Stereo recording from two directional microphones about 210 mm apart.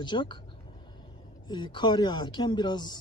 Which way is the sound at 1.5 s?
20° left (ahead or behind).